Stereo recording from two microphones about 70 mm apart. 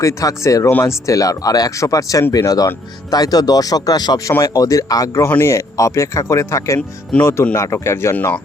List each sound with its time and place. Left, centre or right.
0.0 s a man's voice: left
4.3 s a man's voice: left